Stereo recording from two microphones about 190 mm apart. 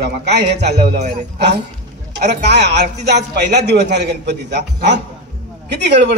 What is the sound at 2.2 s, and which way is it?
A man's voice, 65° right (ahead or behind).